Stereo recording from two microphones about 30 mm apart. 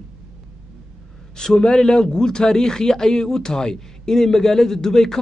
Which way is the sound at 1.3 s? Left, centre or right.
Left.